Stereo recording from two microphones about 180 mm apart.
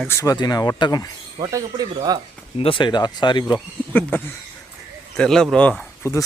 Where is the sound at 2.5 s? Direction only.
30° left (ahead or behind).